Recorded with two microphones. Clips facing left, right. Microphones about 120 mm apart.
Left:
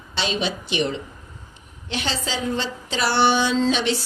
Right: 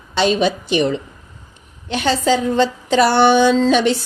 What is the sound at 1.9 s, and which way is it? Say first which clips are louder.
A woman's voice: right 11 dB; 50° right (ahead or behind).